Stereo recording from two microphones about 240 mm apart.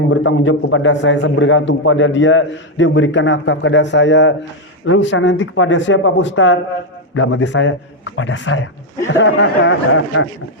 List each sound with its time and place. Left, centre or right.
0.1 s a man's voice: left